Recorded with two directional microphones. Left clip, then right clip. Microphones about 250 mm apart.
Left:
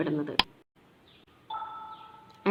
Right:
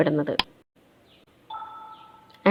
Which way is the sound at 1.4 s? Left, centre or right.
Centre.